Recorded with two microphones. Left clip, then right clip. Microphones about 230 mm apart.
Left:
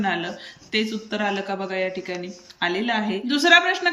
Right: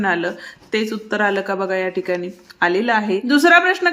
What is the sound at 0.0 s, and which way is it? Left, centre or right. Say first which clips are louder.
Speech: right 6 dB; centre.